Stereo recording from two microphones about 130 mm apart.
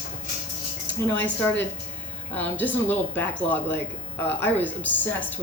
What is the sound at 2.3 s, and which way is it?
Speech, 15° left (ahead or behind).